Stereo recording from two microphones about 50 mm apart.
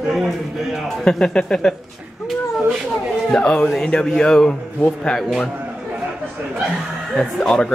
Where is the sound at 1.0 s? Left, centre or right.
Centre.